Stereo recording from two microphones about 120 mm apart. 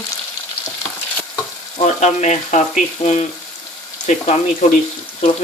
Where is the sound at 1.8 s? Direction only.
75° left (ahead or behind).